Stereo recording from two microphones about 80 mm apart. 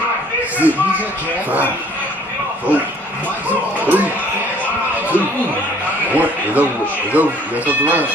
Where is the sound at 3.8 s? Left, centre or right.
Right.